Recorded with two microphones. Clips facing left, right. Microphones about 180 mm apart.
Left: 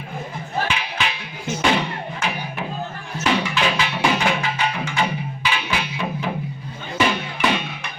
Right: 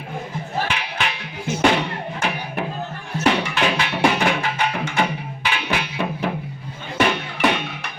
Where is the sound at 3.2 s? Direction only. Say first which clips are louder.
Right 1 dB; 60° right (ahead or behind).